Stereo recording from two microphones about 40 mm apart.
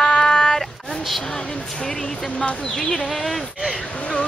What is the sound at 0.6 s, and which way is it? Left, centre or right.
Speech, centre.